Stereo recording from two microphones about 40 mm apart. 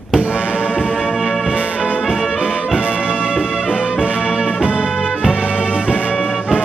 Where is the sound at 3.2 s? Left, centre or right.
Right.